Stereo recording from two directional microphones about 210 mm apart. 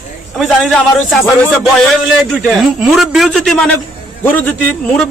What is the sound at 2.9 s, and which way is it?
A man's voice, centre (ahead or behind).